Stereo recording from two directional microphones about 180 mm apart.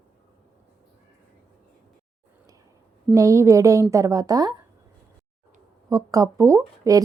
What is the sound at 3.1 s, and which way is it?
Speech, 15° right (ahead or behind).